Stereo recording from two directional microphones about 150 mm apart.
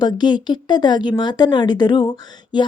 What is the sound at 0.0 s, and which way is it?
A woman's voice, 30° left (ahead or behind).